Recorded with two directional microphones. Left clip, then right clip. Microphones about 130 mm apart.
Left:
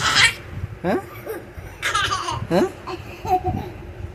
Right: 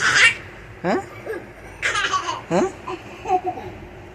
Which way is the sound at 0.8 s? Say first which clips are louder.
Right 1 dB; 30° left (ahead or behind).